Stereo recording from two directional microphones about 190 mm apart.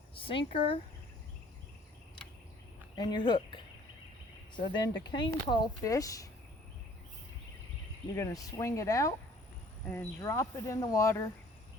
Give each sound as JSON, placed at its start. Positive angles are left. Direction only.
{"t": 0.1, "sound": "a sound", "side_deg": 30}
{"t": 2.9, "sound": "speech", "side_deg": 25}
{"t": 4.6, "sound": "speech", "side_deg": 25}
{"t": 8.1, "sound": "speech", "side_deg": 15}